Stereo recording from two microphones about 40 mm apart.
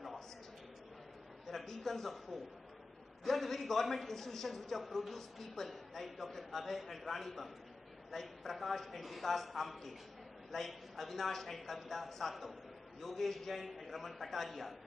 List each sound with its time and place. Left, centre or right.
1.5 s a man's voice: centre